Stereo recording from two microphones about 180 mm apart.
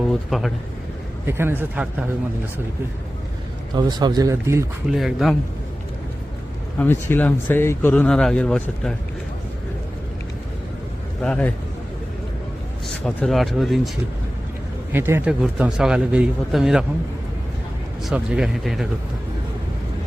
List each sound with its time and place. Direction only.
0.1 s a man's voice: centre (ahead or behind)
1.3 s a man's voice: 10° right (ahead or behind)
3.8 s speech: 25° right (ahead or behind)
4.9 s a man's voice: centre (ahead or behind)
6.7 s speech: 10° left (ahead or behind)
11.2 s speech: 5° left (ahead or behind)
13.1 s a man's voice: centre (ahead or behind)
14.9 s a man's voice: 10° right (ahead or behind)
18.0 s a man's voice: 5° right (ahead or behind)